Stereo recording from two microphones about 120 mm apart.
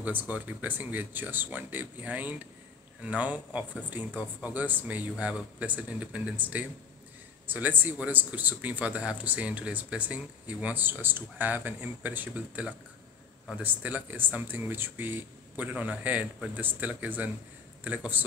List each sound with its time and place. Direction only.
0.0 s speech: 15° right (ahead or behind)